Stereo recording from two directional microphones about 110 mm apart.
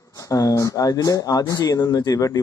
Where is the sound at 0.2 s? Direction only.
30° left (ahead or behind).